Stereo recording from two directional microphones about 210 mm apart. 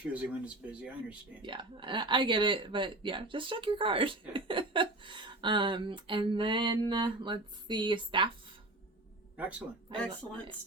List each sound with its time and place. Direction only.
0.1 s speech: 5° right (ahead or behind)
1.4 s speech: 25° right (ahead or behind)
9.4 s speech: 5° right (ahead or behind)
9.9 s speech: 20° right (ahead or behind)